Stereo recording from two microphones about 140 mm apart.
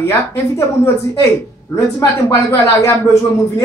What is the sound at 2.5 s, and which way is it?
Speech, 20° left (ahead or behind).